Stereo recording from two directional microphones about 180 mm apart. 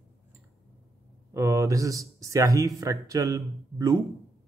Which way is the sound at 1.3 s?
15° right (ahead or behind).